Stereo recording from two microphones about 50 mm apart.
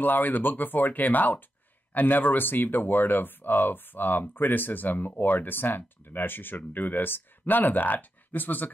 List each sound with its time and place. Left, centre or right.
0.0 s speech: left